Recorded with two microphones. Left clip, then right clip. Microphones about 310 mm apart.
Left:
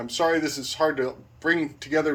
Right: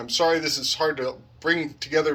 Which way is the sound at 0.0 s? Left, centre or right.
Centre.